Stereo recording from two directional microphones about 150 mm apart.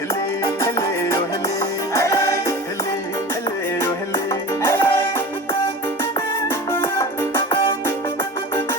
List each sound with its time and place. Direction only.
1.9 s music: 20° left (ahead or behind)
4.3 s music: 15° left (ahead or behind)